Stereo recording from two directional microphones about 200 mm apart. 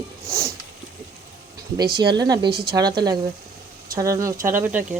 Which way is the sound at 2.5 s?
50° right (ahead or behind).